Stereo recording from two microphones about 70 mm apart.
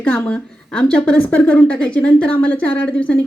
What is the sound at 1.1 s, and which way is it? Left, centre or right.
A woman's voice, left.